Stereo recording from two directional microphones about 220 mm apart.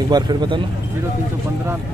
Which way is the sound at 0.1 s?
20° right (ahead or behind).